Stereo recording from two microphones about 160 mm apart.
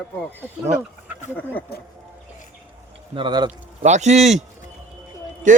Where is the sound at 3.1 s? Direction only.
30° right (ahead or behind).